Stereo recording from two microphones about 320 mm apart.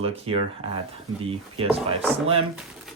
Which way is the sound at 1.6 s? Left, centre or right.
Centre.